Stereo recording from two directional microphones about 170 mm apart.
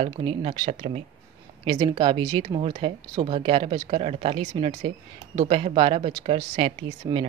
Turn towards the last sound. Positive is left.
turn(degrees=-35)  # may be behind; listen again after turning